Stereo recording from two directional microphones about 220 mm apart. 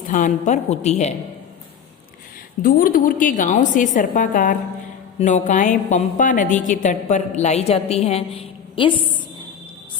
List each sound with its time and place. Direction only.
0.1 s a woman's voice: 35° left (ahead or behind)
2.6 s a woman's voice: 40° left (ahead or behind); by 8.9 s 25° left (ahead or behind)